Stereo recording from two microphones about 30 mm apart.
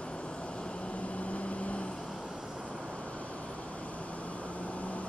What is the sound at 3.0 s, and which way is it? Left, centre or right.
Vehicle, left.